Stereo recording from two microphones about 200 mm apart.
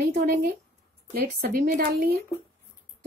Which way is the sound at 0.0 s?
50° right (ahead or behind).